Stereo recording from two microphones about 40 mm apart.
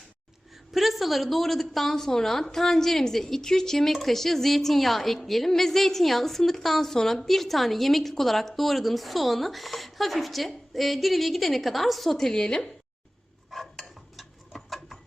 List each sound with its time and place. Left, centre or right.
0.7 s a woman's voice: centre
12.1 s a woman's voice: centre
13.5 s dog: centre